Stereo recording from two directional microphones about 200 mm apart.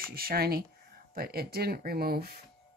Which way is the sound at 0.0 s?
50° right (ahead or behind).